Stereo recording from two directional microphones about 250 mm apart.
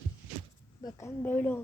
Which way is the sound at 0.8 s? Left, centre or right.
Centre.